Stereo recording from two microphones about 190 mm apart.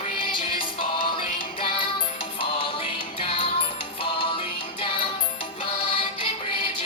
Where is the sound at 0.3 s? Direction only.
25° left (ahead or behind).